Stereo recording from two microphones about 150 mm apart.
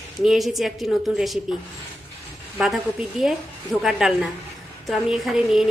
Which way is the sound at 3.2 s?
5° right (ahead or behind).